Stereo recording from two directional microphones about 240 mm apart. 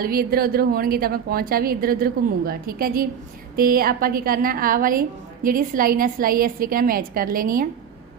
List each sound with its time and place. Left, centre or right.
0.0 s a woman's voice: right